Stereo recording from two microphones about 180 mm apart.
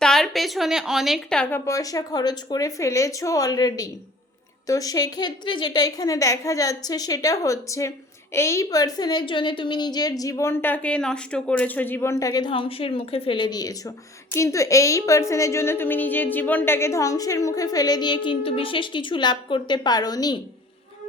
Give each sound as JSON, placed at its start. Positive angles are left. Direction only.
{"t": 0.0, "sound": "a woman's voice", "side_deg": 0}